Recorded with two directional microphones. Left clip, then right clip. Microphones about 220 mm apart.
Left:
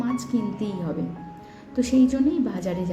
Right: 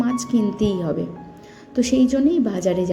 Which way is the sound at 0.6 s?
30° right (ahead or behind).